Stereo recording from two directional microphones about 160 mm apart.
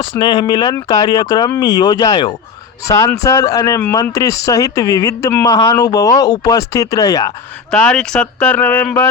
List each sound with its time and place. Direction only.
0.0 s speech: 30° left (ahead or behind)
7.7 s speech: 5° left (ahead or behind)